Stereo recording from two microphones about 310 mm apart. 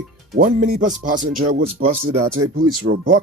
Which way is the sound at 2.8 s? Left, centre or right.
Right.